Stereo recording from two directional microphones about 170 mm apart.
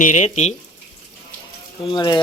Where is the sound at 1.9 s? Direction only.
25° left (ahead or behind).